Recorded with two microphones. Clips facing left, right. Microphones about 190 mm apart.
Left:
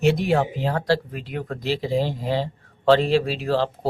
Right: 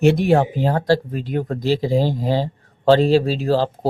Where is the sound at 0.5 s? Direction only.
45° right (ahead or behind).